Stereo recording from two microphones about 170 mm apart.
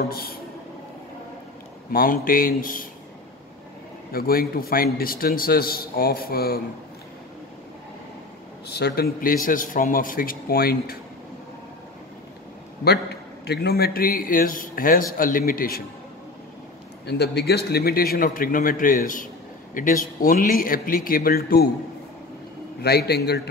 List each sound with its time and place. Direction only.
0.1 s a man's voice: 60° left (ahead or behind)
1.9 s a man's voice: 55° left (ahead or behind)
4.1 s a man's voice: 60° left (ahead or behind)
8.6 s a man's voice: 70° left (ahead or behind)
12.8 s a man's voice: 75° left (ahead or behind)
17.0 s a man's voice: 75° left (ahead or behind)
22.8 s a man's voice: 70° left (ahead or behind)